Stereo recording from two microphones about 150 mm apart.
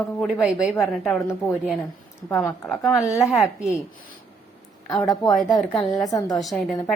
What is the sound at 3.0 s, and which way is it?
Speech, centre (ahead or behind).